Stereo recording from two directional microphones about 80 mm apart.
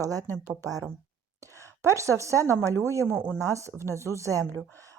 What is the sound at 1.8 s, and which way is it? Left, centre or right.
Speech, right.